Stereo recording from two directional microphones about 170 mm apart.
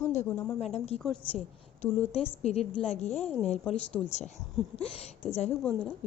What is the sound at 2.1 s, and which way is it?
Speech, 35° left (ahead or behind).